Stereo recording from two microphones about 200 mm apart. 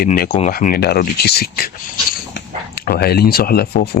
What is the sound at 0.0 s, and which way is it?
Speech, 40° left (ahead or behind).